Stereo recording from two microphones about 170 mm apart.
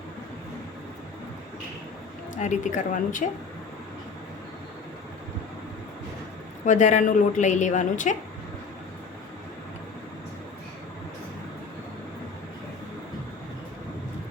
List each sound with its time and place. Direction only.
2.3 s speech: 45° left (ahead or behind)
6.7 s speech: 45° left (ahead or behind)